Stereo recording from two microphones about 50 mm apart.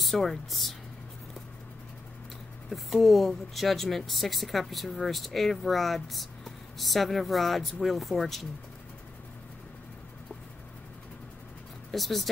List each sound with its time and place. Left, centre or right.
0.0 s speech: centre
2.7 s speech: centre
11.9 s speech: centre